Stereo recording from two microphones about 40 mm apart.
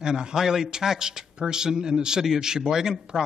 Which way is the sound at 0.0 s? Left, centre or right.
Centre.